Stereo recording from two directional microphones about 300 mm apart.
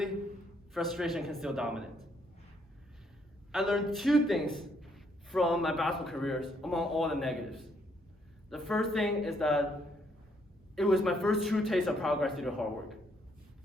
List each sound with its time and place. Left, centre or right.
0.7 s a man's voice: centre
3.5 s a man's voice: centre
10.8 s a man's voice: centre